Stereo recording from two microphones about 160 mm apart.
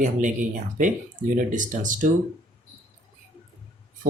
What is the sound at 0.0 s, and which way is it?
Speech, 50° right (ahead or behind).